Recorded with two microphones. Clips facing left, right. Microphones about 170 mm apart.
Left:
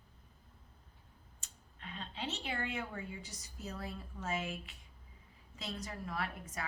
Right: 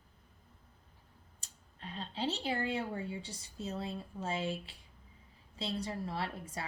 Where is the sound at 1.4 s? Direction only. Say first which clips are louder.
Right 3 dB; 35° right (ahead or behind).